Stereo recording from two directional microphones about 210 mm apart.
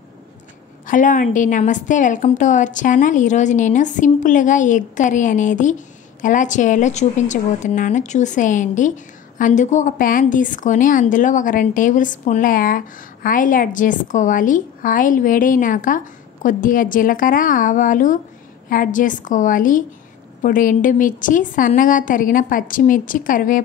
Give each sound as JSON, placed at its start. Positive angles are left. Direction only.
{"t": 0.8, "sound": "speech", "side_deg": 40}